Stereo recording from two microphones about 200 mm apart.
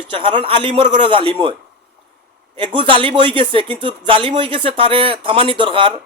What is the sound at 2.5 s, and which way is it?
Speech, 25° right (ahead or behind).